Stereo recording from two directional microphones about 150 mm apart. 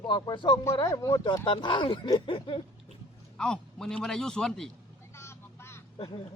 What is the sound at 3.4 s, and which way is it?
A man's voice, 5° left (ahead or behind).